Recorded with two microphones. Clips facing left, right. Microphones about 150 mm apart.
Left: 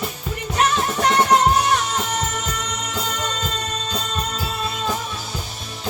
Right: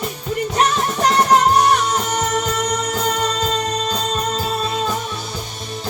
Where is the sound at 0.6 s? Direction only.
35° right (ahead or behind).